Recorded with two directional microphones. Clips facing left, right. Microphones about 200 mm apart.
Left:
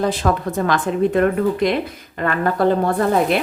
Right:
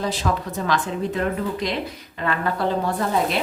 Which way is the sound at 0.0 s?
55° left (ahead or behind).